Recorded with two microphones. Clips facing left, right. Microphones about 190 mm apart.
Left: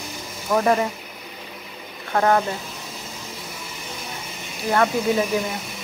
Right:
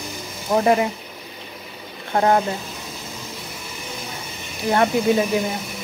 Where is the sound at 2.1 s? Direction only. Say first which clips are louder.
Right 1 dB; 25° right (ahead or behind).